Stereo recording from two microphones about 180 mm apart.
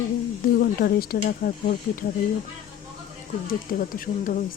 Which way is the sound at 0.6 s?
55° left (ahead or behind).